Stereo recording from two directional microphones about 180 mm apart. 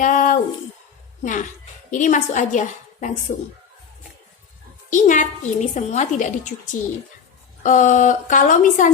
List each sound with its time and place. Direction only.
0.0 s a woman's voice: 45° left (ahead or behind)
4.9 s a woman's voice: 45° left (ahead or behind)